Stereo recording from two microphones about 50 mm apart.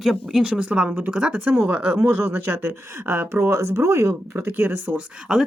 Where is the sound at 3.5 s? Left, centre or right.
Right.